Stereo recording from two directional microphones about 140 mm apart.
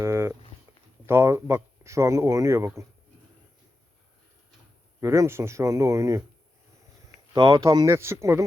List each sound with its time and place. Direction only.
0.0 s a sound: 20° right (ahead or behind)
1.0 s speech: 15° right (ahead or behind)
4.9 s speech: 20° right (ahead or behind)
7.3 s speech: 30° right (ahead or behind)